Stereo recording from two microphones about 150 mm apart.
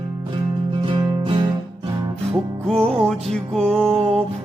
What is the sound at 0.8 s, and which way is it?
Music, 35° right (ahead or behind).